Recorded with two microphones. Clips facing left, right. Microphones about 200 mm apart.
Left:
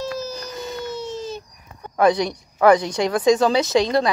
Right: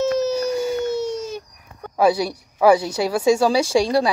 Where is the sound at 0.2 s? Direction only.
70° right (ahead or behind).